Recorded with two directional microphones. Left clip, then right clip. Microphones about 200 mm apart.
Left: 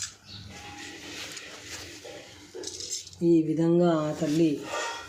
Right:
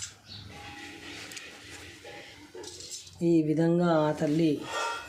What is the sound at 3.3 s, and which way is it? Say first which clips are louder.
Speech: left 1 dB; 40° right (ahead or behind).